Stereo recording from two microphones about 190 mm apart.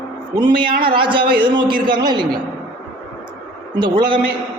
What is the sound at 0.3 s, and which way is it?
A man's voice, 25° right (ahead or behind).